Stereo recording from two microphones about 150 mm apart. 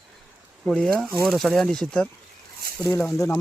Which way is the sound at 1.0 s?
15° right (ahead or behind).